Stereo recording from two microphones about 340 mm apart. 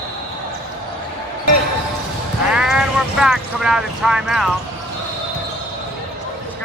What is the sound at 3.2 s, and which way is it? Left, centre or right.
Speech, centre.